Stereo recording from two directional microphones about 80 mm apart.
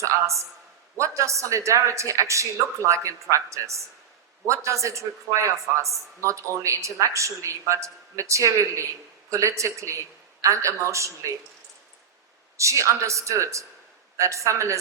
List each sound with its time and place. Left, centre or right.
0.0 s a man's voice: right
12.5 s speech: right